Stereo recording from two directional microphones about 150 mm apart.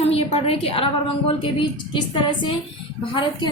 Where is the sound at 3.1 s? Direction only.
35° left (ahead or behind).